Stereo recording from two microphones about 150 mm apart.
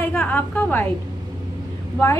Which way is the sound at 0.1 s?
5° left (ahead or behind).